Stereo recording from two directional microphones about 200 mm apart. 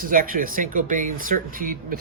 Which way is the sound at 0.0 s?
45° right (ahead or behind).